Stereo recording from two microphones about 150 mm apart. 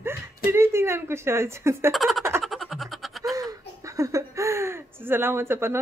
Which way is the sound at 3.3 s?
25° right (ahead or behind).